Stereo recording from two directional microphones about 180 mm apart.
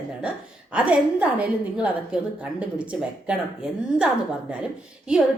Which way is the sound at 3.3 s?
5° right (ahead or behind).